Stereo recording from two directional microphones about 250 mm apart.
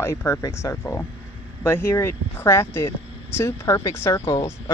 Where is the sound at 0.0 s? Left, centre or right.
Centre.